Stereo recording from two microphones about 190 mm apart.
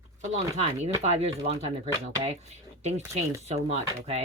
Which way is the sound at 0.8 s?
35° right (ahead or behind).